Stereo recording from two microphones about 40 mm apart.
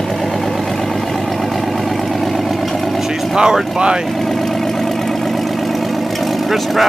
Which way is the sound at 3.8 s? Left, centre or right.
Right.